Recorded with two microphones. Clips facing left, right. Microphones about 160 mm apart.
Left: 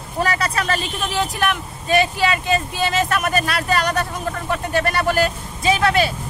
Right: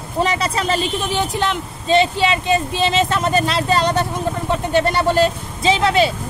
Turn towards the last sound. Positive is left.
turn(degrees=-20)  # may be behind; listen again after turning